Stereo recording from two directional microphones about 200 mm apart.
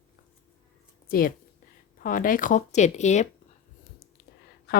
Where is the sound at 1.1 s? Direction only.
45° left (ahead or behind).